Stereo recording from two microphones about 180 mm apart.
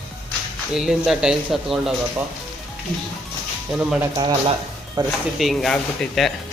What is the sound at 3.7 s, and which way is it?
Speech, 10° right (ahead or behind).